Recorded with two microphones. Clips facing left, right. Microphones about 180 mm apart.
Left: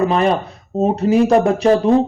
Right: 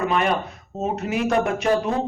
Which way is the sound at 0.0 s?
35° left (ahead or behind).